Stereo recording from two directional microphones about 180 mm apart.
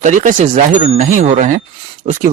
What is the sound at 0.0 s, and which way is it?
A man's voice, 45° right (ahead or behind).